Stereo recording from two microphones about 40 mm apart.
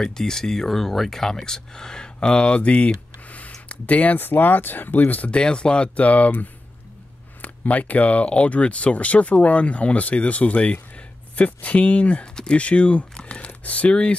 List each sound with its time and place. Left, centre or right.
0.0 s speech: centre; by 2.9 s left
3.3 s a sound: left
3.6 s speech: left
4.2 s speech: left
5.3 s speech: left
5.9 s speech: left
7.4 s speech: left
13.1 s crumpling: left
13.5 s speech: left